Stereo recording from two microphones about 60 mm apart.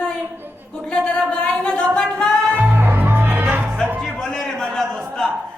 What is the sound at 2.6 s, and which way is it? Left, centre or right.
Music, right.